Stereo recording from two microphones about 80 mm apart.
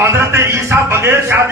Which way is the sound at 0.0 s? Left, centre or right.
Right.